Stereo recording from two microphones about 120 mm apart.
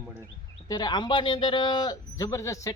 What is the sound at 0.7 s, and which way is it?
Speech, 35° left (ahead or behind).